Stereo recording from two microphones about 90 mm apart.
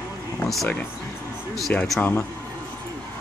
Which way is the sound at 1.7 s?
15° left (ahead or behind).